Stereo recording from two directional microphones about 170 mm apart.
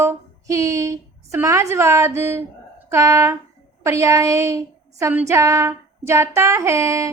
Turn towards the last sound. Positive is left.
turn(degrees=-20)  # may be behind; listen again after turning